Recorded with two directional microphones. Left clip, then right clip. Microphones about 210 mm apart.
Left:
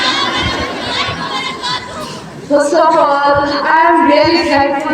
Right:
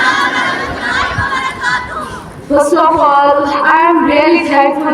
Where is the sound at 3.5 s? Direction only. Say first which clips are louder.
Right 1 dB; 30° left (ahead or behind).